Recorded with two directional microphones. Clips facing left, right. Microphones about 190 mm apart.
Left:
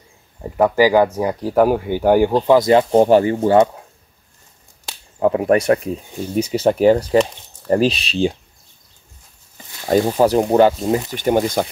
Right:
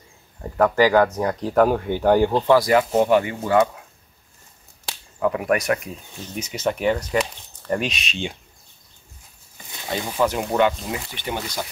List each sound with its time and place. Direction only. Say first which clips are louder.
0.4 s speech: left 3 dB; 15° left (ahead or behind)
2.6 s speech: left 5 dB; 30° left (ahead or behind)
5.2 s speech: left 6 dB; 30° left (ahead or behind)
9.8 s speech: left 8 dB; 45° left (ahead or behind)